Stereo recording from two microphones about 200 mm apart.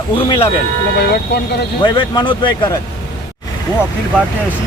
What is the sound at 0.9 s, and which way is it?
Speech, 55° left (ahead or behind).